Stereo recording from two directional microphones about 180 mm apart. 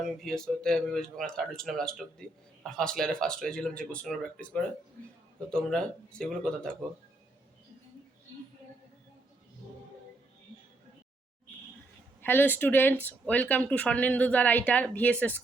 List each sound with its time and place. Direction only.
0.0 s speech: centre (ahead or behind)
12.2 s speech: 10° left (ahead or behind)